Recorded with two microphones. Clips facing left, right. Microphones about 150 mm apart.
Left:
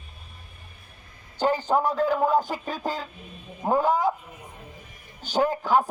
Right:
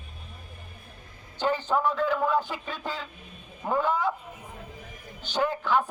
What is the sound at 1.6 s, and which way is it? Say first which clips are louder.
Speech: left 3 dB; 40° left (ahead or behind).